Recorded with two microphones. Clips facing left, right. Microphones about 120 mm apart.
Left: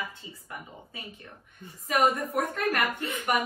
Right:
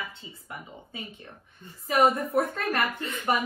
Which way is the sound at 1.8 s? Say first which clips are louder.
Right 2 dB; 30° right (ahead or behind).